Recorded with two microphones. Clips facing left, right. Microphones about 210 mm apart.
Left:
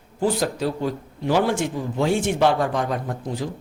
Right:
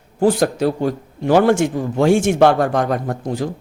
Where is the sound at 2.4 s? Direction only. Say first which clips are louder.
Right 6 dB; 60° right (ahead or behind).